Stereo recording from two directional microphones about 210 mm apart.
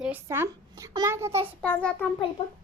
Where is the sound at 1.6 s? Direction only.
5° left (ahead or behind).